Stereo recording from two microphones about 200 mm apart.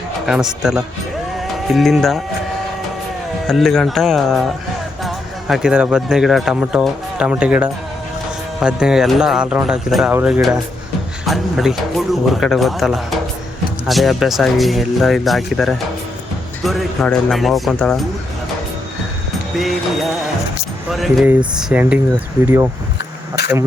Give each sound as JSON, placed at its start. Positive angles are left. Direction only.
{"t": 0.3, "sound": "speech", "side_deg": -5}
{"t": 3.4, "sound": "speech", "side_deg": 0}
{"t": 20.9, "sound": "speech", "side_deg": 0}
{"t": 23.0, "sound": "a sound", "side_deg": 55}